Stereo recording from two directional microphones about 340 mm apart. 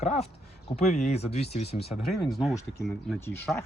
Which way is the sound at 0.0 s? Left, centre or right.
Centre.